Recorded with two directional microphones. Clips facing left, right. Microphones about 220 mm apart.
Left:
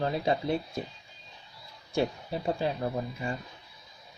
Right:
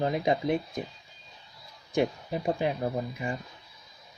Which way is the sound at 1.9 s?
15° right (ahead or behind).